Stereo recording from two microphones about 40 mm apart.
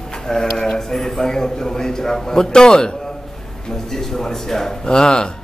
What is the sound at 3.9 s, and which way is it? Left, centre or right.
Speech, centre.